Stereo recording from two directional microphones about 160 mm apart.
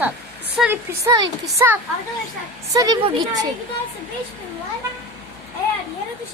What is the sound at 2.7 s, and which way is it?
Speech, 25° right (ahead or behind).